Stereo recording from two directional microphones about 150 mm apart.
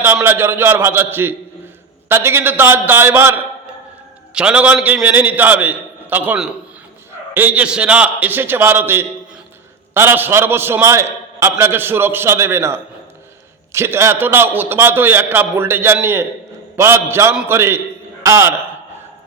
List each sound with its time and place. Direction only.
0.0 s a man's voice: 15° right (ahead or behind)